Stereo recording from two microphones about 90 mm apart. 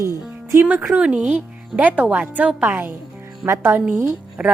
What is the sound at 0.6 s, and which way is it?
A woman's voice, 10° right (ahead or behind).